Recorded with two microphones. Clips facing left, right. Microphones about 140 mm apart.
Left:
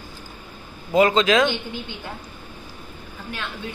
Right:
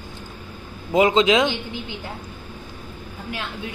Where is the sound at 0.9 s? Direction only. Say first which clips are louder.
Even; 20° right (ahead or behind).